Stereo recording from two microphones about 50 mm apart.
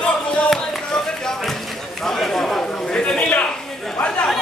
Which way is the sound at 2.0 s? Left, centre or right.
Centre.